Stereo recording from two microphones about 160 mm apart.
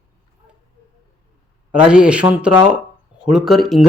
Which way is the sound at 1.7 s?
5° right (ahead or behind).